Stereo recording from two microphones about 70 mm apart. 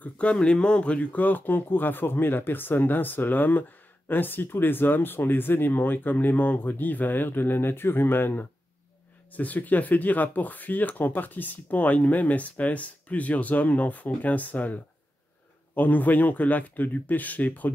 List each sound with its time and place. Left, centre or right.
0.0 s speech: centre